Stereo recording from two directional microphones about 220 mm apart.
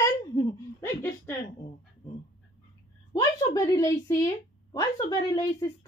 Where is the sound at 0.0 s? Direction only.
15° left (ahead or behind).